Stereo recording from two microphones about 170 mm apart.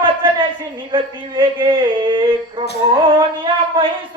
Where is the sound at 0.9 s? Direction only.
30° right (ahead or behind).